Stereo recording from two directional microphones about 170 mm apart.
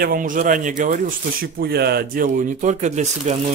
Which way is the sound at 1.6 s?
70° right (ahead or behind).